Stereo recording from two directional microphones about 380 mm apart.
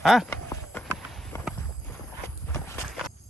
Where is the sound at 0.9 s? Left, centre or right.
Centre.